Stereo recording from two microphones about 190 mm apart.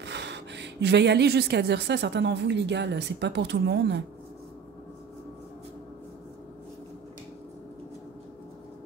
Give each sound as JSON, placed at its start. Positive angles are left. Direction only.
{"t": 0.0, "sound": "a woman's voice", "side_deg": -65}